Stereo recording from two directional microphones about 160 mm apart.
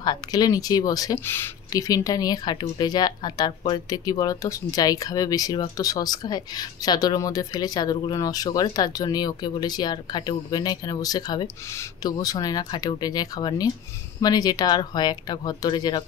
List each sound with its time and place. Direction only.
0.0 s speech: 25° left (ahead or behind)